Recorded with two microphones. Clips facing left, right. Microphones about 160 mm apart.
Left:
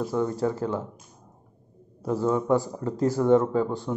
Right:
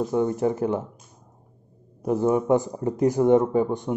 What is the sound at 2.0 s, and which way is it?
A man's voice, 20° right (ahead or behind).